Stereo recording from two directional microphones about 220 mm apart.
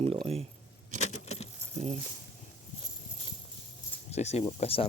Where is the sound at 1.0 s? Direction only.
30° left (ahead or behind).